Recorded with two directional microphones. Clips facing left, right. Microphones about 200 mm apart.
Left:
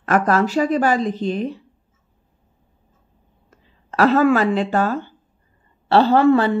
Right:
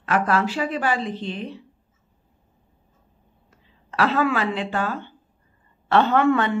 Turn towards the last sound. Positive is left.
turn(degrees=35)  # may be behind; listen again after turning